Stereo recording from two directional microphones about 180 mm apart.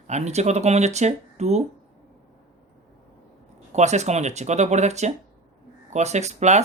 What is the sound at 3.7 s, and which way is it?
Speech, 40° right (ahead or behind).